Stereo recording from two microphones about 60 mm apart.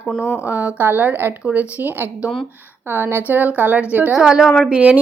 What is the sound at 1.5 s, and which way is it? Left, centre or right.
Speech, right.